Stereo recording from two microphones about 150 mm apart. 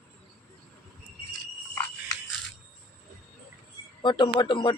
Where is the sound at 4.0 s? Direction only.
30° left (ahead or behind).